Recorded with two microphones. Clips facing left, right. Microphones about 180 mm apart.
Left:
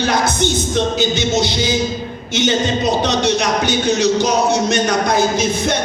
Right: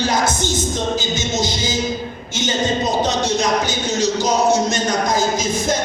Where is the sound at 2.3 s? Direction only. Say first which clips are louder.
Left 4 dB; 70° left (ahead or behind).